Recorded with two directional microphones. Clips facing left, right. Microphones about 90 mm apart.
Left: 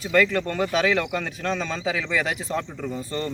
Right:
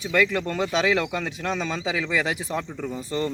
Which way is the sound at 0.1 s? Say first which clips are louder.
Left 2 dB; 5° right (ahead or behind).